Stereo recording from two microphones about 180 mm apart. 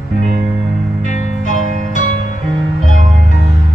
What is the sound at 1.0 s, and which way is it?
Music, 45° left (ahead or behind).